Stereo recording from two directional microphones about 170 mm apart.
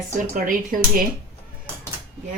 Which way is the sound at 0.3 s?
55° right (ahead or behind).